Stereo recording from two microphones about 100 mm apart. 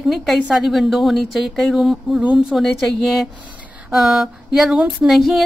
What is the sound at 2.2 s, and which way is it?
Speech, 10° right (ahead or behind).